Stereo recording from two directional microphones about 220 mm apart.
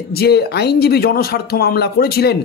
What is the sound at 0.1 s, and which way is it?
Speech, 45° left (ahead or behind).